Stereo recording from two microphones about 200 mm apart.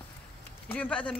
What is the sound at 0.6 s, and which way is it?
Speech, 5° left (ahead or behind).